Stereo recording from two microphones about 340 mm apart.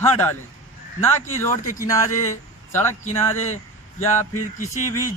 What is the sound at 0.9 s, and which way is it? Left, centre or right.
Speech, centre.